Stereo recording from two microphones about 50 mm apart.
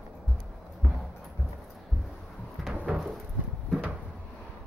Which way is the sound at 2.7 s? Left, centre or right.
Right.